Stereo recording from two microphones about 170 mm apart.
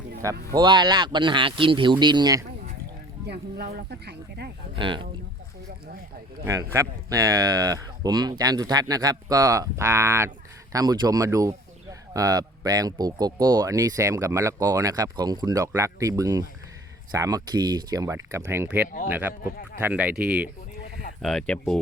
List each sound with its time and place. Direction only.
0.5 s speech: 25° right (ahead or behind)
3.2 s speech: 70° right (ahead or behind)
4.7 s speech: 30° right (ahead or behind)
6.4 s speech: 15° right (ahead or behind); by 21.6 s 5° left (ahead or behind)